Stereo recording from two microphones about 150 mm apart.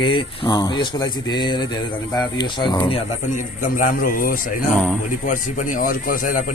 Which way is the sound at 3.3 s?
65° left (ahead or behind).